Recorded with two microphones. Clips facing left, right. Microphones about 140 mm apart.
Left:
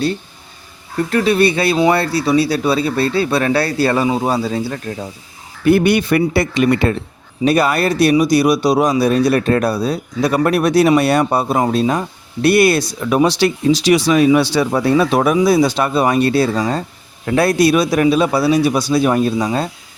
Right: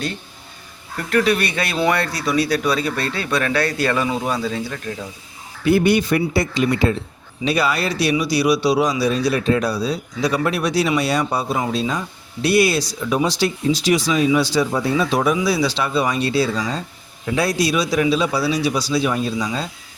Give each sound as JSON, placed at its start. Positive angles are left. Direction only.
{"t": 1.1, "sound": "speech", "side_deg": 30}
{"t": 5.6, "sound": "speech", "side_deg": 60}
{"t": 7.4, "sound": "a man's voice", "side_deg": 50}